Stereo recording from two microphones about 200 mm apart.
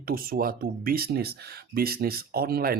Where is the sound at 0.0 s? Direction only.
45° right (ahead or behind).